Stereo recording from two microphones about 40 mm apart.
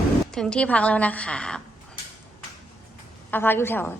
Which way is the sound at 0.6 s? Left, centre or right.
Left.